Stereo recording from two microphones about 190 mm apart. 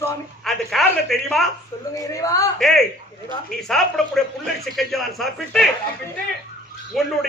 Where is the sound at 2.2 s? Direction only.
15° left (ahead or behind).